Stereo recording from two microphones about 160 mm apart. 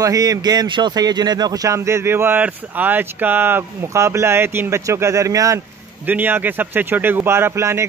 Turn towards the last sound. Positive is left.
turn(degrees=-15)  # may be behind; listen again after turning